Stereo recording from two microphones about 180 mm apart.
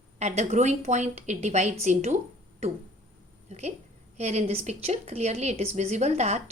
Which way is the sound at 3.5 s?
40° right (ahead or behind).